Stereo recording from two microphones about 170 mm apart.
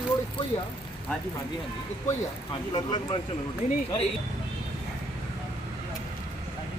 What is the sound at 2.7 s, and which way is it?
Speech, 25° left (ahead or behind).